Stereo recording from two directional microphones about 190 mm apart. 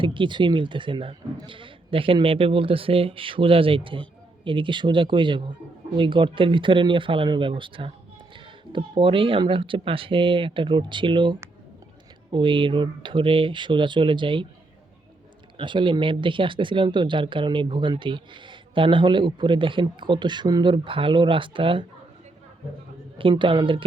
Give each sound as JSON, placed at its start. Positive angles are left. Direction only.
{"t": 0.0, "sound": "speech", "side_deg": -25}
{"t": 15.5, "sound": "speech", "side_deg": -25}
{"t": 23.1, "sound": "speech", "side_deg": -25}